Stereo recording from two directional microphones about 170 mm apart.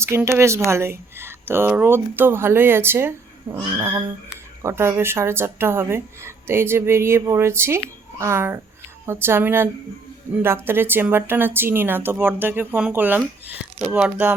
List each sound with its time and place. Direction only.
0.0 s speech: 15° right (ahead or behind)